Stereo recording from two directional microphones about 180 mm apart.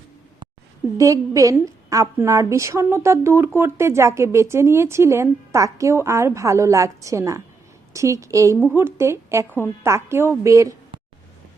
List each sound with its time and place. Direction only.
0.9 s a woman's voice: 20° right (ahead or behind)